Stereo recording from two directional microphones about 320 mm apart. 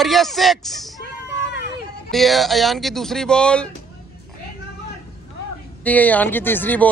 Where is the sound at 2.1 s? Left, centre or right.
Centre.